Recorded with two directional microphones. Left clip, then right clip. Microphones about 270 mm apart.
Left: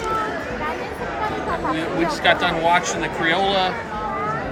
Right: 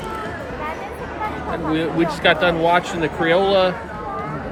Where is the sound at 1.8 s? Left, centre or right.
Centre.